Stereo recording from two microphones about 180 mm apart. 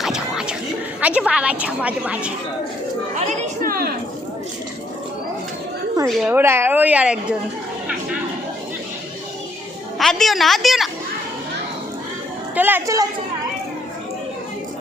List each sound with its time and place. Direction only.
0.0 s whispering: 5° right (ahead or behind)
1.0 s a woman's voice: 5° right (ahead or behind)
3.2 s a sound: 45° right (ahead or behind)
6.2 s a woman's voice: 10° right (ahead or behind)
10.0 s a woman's voice: centre (ahead or behind)
12.5 s a woman's voice: 10° right (ahead or behind)